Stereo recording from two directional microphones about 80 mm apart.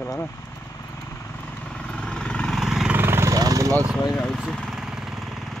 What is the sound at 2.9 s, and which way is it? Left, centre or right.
Vehicle, right.